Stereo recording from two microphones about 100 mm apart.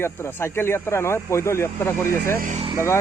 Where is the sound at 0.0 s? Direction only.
25° left (ahead or behind).